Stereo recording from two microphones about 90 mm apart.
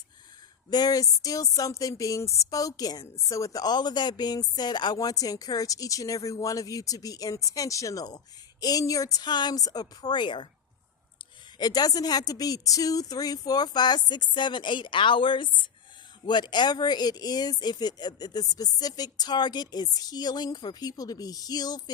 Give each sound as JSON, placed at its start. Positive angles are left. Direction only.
{"t": 0.7, "sound": "speech", "side_deg": 45}
{"t": 11.5, "sound": "speech", "side_deg": 45}
{"t": 16.2, "sound": "speech", "side_deg": 55}